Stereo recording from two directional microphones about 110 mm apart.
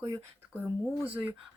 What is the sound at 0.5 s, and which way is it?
Speech, 15° right (ahead or behind).